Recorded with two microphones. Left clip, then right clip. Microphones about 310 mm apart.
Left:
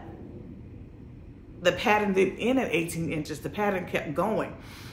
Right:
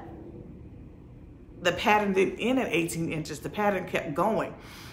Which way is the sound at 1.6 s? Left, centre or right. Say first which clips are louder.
Even; centre.